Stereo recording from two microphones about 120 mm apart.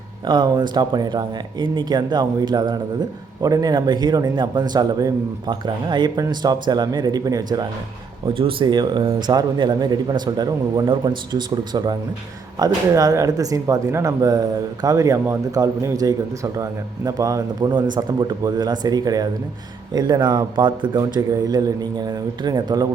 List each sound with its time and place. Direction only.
0.3 s speech: 35° right (ahead or behind)
8.3 s speech: 45° right (ahead or behind)